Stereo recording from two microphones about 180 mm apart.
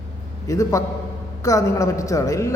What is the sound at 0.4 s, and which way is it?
A man's voice, 20° left (ahead or behind).